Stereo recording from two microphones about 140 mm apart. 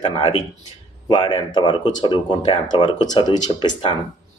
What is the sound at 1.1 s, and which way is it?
Speech, 35° left (ahead or behind).